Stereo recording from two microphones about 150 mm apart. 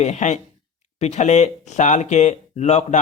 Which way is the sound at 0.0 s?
50° left (ahead or behind).